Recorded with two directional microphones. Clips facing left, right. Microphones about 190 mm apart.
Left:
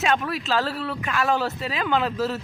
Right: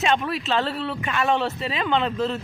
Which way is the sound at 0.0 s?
Centre (ahead or behind).